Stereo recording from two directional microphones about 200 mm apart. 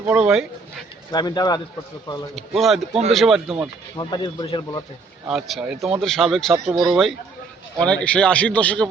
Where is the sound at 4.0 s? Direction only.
20° left (ahead or behind).